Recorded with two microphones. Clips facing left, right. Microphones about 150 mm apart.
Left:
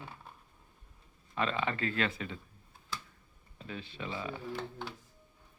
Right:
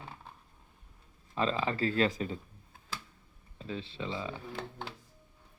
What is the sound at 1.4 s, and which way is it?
Speech, 30° right (ahead or behind).